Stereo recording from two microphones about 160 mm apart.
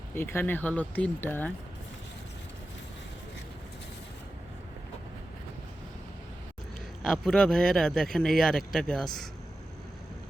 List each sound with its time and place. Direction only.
0.1 s speech: 15° left (ahead or behind)
7.0 s speech: 5° left (ahead or behind)